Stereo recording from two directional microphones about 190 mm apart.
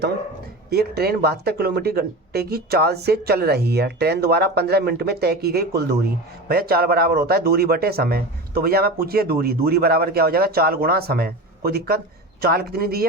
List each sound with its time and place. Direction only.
0.7 s speech: 55° right (ahead or behind)